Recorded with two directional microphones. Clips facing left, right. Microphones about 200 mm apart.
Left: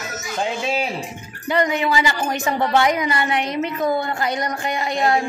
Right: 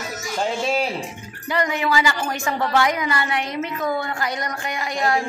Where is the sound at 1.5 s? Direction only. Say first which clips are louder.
Left 2 dB; 20° left (ahead or behind).